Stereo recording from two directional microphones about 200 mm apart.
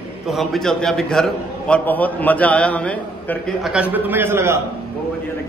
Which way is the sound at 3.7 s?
10° right (ahead or behind).